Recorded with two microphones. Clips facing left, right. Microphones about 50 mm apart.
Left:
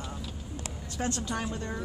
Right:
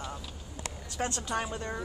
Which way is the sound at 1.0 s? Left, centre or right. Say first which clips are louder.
Even; right.